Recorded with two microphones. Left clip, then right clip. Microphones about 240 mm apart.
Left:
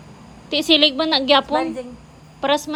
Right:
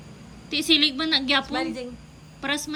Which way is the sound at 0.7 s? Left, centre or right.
Centre.